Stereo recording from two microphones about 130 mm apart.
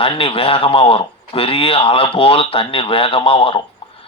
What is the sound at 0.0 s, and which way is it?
Speech, 45° left (ahead or behind).